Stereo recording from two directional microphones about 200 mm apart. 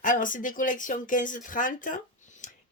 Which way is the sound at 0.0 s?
40° left (ahead or behind).